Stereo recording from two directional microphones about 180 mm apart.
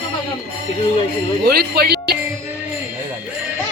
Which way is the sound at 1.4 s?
60° right (ahead or behind).